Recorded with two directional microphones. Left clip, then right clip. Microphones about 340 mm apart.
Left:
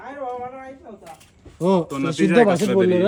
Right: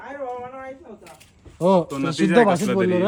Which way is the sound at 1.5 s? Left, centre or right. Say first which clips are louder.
Right 2 dB; centre.